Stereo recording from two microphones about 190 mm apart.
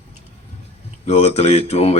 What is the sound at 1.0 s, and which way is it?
Speech, 30° left (ahead or behind).